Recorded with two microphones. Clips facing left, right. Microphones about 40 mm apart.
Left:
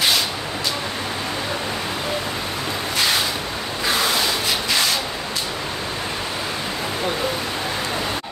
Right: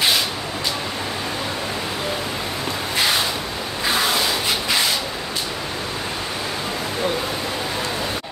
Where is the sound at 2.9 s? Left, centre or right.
Centre.